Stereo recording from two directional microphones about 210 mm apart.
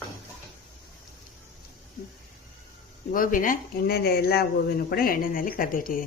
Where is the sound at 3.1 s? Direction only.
40° left (ahead or behind).